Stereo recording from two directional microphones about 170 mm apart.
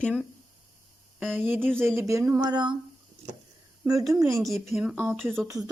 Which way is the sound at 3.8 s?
20° right (ahead or behind).